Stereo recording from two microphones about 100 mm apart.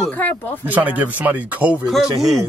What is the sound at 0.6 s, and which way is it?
Speech, 15° right (ahead or behind).